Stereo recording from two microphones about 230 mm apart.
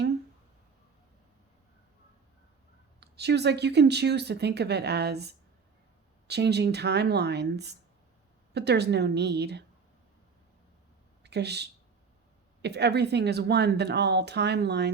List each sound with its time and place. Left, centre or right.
3.0 s speech: right
11.2 s speech: right